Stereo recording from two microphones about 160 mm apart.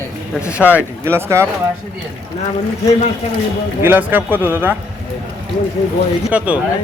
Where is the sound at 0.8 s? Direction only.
15° right (ahead or behind).